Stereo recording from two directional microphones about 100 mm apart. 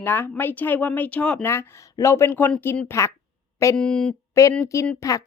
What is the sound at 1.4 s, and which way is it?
Speech, 25° left (ahead or behind).